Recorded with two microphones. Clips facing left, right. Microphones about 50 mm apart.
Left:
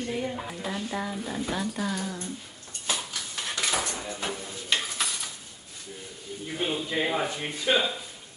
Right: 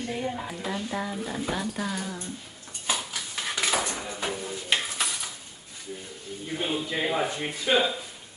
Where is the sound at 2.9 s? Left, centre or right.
Centre.